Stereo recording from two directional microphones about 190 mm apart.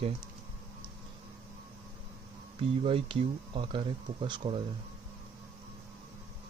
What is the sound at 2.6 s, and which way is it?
Speech, 25° right (ahead or behind).